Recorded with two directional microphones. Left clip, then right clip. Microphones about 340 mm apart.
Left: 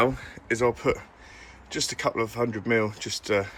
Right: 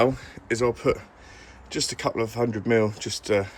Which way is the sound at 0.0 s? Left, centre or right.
Centre.